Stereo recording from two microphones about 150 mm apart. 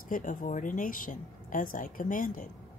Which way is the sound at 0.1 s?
60° left (ahead or behind).